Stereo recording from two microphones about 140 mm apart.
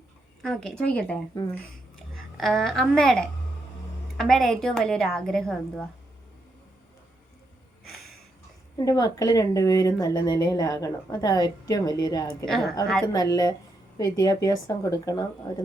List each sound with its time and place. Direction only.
0.4 s a woman's voice: 5° left (ahead or behind)
2.4 s a woman's voice: 5° left (ahead or behind)
7.9 s a sound: centre (ahead or behind)
8.8 s speech: 25° left (ahead or behind)
12.5 s a woman's voice: 5° left (ahead or behind)
13.1 s speech: 25° left (ahead or behind)